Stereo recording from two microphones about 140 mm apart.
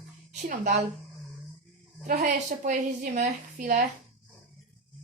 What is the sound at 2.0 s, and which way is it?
A woman's voice, 70° right (ahead or behind).